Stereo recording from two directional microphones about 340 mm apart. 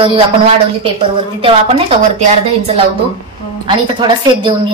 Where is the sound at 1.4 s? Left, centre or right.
Centre.